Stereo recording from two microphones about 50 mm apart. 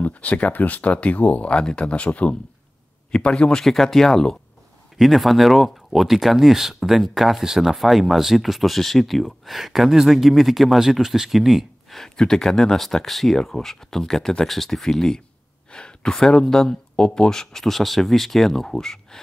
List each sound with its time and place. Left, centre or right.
0.0 s speech: left
3.6 s speech: centre
12.0 s speech: centre